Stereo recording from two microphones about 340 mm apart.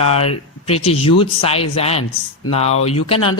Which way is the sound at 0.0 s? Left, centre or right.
Centre.